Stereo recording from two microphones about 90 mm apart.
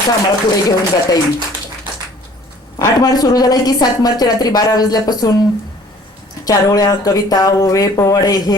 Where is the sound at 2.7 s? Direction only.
45° left (ahead or behind).